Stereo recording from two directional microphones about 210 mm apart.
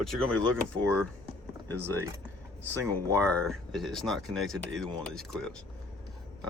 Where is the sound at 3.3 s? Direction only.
Centre (ahead or behind).